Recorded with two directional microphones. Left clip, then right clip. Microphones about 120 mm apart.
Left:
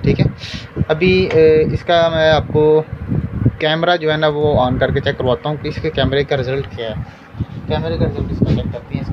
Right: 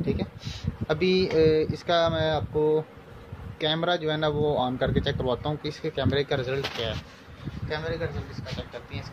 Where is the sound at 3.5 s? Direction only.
5° left (ahead or behind).